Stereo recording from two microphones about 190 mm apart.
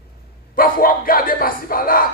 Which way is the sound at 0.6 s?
50° left (ahead or behind).